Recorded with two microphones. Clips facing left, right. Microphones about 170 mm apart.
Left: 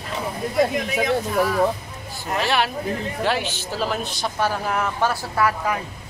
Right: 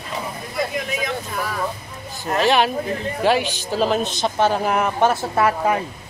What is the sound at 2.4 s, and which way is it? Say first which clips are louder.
Speech: right 5 dB; 20° right (ahead or behind).